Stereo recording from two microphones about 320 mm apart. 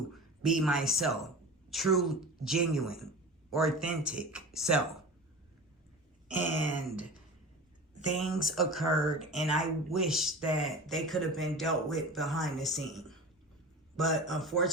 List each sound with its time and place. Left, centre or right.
0.1 s speech: centre
6.4 s throat clearing: left
7.9 s speech: left
8.4 s speech: centre